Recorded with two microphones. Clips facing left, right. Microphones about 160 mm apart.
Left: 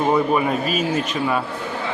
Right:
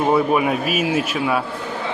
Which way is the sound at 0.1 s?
5° right (ahead or behind).